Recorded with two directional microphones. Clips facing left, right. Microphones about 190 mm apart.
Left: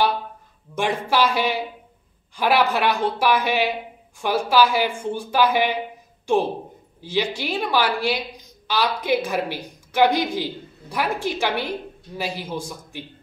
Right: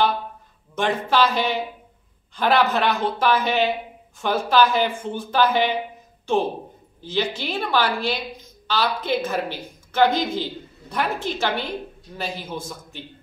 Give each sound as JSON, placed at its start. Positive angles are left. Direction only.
{"t": 0.7, "sound": "a woman's voice", "side_deg": 10}